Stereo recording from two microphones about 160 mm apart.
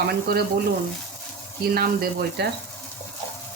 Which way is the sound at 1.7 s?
70° right (ahead or behind).